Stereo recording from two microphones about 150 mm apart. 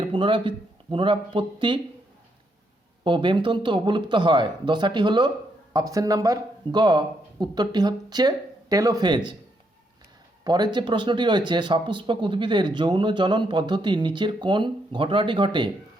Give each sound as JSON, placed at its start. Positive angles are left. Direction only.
{"t": 0.0, "sound": "speech", "side_deg": -35}
{"t": 3.0, "sound": "speech", "side_deg": -30}
{"t": 10.4, "sound": "speech", "side_deg": -30}